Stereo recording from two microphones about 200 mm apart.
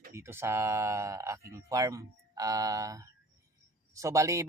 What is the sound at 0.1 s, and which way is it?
Speech, 15° right (ahead or behind).